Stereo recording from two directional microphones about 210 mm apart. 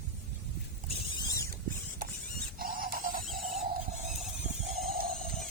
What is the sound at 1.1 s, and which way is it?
Rodents, 15° left (ahead or behind).